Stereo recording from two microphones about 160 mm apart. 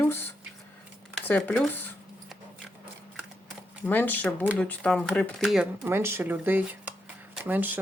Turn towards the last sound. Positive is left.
turn(degrees=-10)  # may be behind; listen again after turning